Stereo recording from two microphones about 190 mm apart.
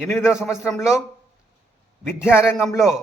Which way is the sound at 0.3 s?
5° right (ahead or behind).